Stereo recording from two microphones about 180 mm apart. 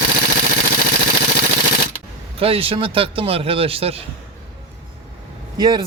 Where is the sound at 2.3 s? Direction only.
30° right (ahead or behind).